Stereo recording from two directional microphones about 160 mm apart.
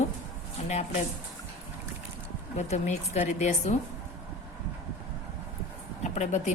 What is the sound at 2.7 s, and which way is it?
A woman's voice, 45° left (ahead or behind).